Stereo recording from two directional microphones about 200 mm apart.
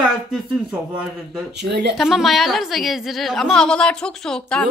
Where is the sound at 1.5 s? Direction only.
55° right (ahead or behind).